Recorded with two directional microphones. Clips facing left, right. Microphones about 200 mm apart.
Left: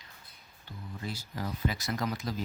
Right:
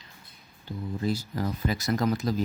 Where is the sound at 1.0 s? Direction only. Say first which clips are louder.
Right 8 dB; 40° right (ahead or behind).